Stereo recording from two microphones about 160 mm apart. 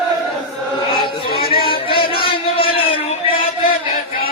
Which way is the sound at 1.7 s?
35° left (ahead or behind).